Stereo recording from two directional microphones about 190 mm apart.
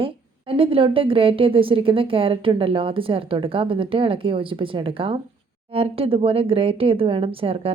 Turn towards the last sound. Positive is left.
turn(degrees=-30)  # may be behind; listen again after turning